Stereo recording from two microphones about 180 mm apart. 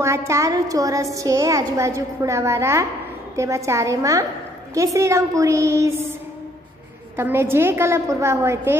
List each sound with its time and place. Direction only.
0.0 s a woman's voice: 15° right (ahead or behind)
7.2 s a woman's voice: 15° right (ahead or behind)